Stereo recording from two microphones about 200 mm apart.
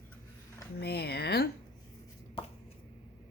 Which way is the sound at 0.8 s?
55° left (ahead or behind).